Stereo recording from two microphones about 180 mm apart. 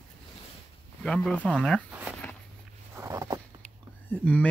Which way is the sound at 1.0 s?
5° left (ahead or behind).